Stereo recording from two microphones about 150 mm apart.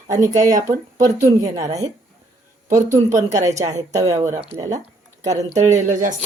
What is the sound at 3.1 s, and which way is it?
Speech, 55° right (ahead or behind).